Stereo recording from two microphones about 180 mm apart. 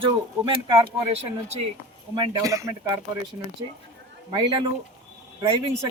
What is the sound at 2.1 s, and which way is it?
Speech, 20° right (ahead or behind).